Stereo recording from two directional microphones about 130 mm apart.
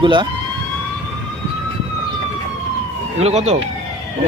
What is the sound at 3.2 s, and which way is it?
Speech, 55° right (ahead or behind).